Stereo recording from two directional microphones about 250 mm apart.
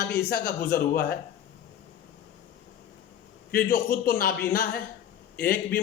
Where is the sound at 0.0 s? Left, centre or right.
Left.